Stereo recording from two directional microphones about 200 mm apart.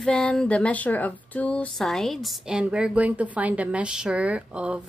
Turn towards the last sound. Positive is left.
turn(degrees=-5)  # may be behind; listen again after turning